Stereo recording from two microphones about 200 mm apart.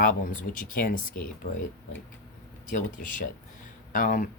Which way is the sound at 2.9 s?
40° left (ahead or behind).